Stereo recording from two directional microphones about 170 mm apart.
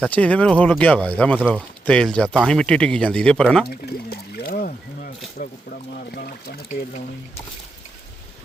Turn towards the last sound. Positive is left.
turn(degrees=55)  # may be behind; listen again after turning